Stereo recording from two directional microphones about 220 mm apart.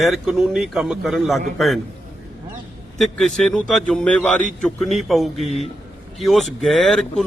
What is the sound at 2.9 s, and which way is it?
Speech, centre (ahead or behind).